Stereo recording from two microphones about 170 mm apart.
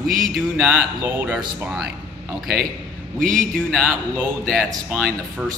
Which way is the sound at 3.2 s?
50° right (ahead or behind).